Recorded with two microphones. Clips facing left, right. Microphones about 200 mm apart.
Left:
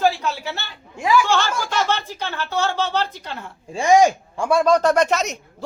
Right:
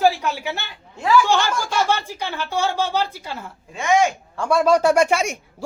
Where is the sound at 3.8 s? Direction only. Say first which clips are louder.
Left 4 dB; 35° left (ahead or behind).